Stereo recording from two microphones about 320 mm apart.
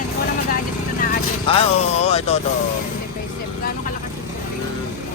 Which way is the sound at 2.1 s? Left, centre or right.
Centre.